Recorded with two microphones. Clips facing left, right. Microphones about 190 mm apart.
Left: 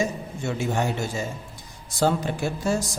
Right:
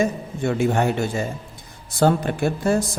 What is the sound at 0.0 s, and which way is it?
A man's voice, 55° right (ahead or behind).